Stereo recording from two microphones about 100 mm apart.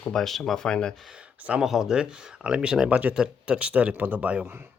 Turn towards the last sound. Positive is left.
turn(degrees=-15)  # may be behind; listen again after turning